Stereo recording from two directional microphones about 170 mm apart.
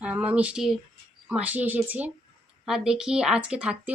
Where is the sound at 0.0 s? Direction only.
5° right (ahead or behind).